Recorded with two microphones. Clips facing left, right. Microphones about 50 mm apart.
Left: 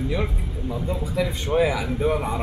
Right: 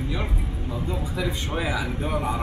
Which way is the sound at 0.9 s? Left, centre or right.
Centre.